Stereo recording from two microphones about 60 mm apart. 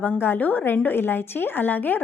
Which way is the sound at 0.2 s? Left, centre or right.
Left.